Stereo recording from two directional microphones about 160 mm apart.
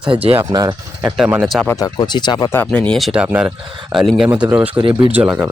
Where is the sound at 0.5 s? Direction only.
25° right (ahead or behind).